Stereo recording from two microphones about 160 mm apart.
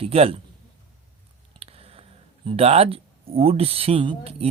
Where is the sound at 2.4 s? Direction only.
40° right (ahead or behind).